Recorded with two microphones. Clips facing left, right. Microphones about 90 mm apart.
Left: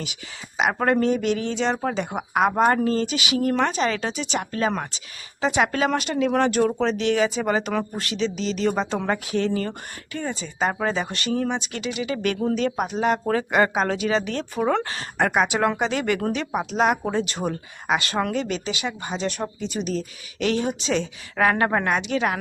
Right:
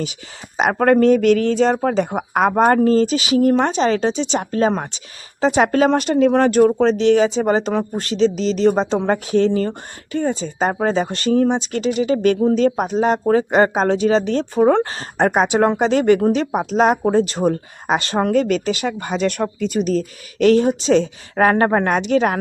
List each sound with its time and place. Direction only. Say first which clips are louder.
0.0 s speech: right 7 dB; 35° right (ahead or behind)